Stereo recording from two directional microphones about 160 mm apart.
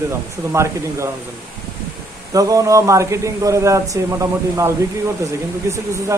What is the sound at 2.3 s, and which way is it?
Speech, 20° right (ahead or behind).